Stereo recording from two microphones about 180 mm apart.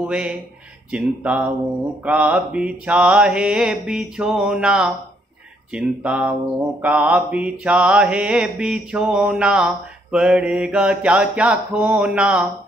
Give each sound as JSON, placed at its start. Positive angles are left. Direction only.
{"t": 0.0, "sound": "mantra", "side_deg": -5}